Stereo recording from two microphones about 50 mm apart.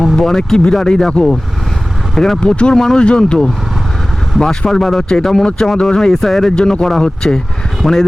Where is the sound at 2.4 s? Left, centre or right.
Centre.